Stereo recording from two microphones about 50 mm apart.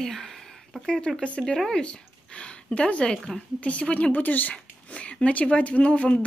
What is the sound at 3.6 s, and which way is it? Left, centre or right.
Speech, left.